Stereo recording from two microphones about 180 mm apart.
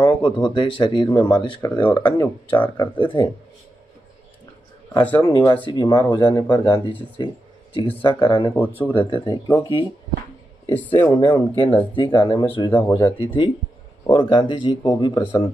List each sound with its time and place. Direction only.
0.0 s speech: 25° left (ahead or behind)
1.7 s speech: 10° left (ahead or behind)
2.8 s speech: 25° left (ahead or behind)
5.0 s speech: 10° left (ahead or behind)
5.3 s speech: 20° left (ahead or behind)
8.5 s speech: 10° left (ahead or behind)
8.9 s speech: 25° left (ahead or behind)
10.7 s speech: 10° left (ahead or behind)
11.1 s speech: 25° left (ahead or behind)
12.7 s speech: 10° left (ahead or behind)
13.2 s speech: 30° left (ahead or behind)